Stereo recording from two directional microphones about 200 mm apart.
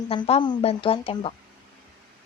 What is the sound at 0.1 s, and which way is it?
Speech, 30° left (ahead or behind).